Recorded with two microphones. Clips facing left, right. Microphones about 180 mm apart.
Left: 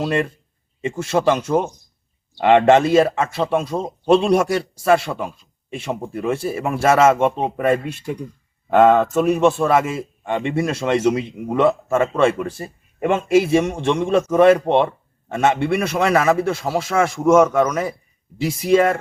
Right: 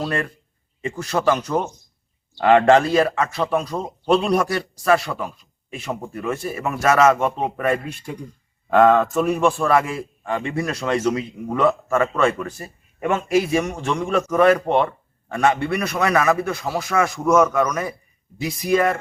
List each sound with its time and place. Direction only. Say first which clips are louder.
0.0 s a man's voice: left 4 dB; 25° left (ahead or behind)